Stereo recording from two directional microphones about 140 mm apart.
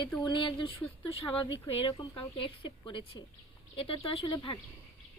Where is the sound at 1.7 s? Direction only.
40° left (ahead or behind).